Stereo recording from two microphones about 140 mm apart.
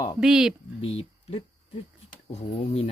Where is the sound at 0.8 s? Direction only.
45° left (ahead or behind).